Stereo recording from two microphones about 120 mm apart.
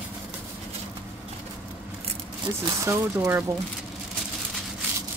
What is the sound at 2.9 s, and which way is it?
Speech, 20° right (ahead or behind).